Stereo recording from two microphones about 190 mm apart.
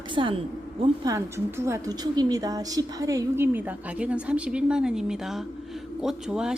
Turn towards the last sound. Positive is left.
turn(degrees=-5)  # may be behind; listen again after turning